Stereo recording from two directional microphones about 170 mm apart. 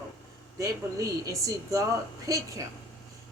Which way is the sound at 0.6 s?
20° right (ahead or behind).